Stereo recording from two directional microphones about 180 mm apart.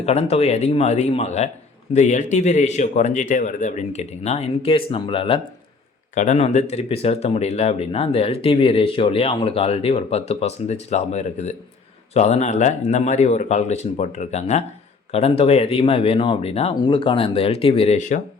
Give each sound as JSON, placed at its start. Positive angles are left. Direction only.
{"t": 0.0, "sound": "speech", "side_deg": 35}